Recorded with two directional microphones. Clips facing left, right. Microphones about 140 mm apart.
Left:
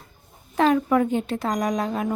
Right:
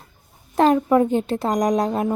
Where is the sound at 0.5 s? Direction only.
35° right (ahead or behind).